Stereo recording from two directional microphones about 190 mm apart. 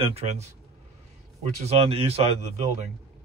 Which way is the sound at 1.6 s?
30° right (ahead or behind).